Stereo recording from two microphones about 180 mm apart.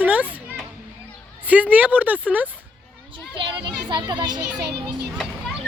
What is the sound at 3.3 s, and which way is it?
A child's voice, 25° right (ahead or behind).